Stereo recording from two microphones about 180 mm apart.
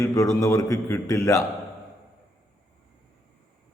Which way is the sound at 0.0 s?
15° left (ahead or behind).